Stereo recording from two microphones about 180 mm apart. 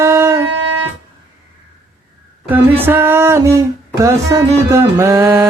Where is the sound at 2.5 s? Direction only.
10° right (ahead or behind).